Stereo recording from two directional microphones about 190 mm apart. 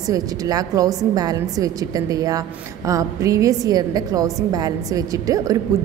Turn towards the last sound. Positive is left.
turn(degrees=-20)  # may be behind; listen again after turning